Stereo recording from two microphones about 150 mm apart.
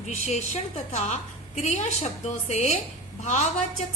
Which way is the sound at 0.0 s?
50° left (ahead or behind).